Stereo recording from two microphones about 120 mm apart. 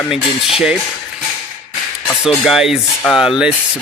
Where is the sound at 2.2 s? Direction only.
5° right (ahead or behind).